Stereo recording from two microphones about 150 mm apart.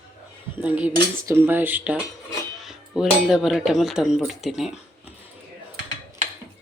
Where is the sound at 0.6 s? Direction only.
10° right (ahead or behind).